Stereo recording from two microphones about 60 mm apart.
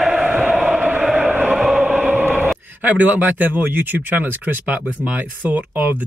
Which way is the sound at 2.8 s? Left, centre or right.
Right.